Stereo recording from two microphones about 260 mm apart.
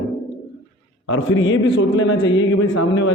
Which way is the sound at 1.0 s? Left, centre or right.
Left.